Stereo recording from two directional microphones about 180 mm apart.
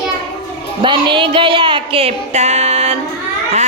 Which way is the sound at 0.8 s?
25° right (ahead or behind).